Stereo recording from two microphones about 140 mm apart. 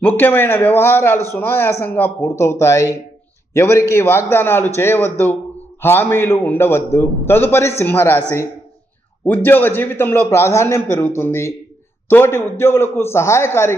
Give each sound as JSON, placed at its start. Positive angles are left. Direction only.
{"t": 0.0, "sound": "a man's voice", "side_deg": 15}